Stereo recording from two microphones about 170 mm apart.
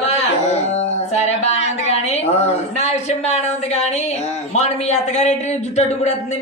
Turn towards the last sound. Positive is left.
turn(degrees=40)  # may be behind; listen again after turning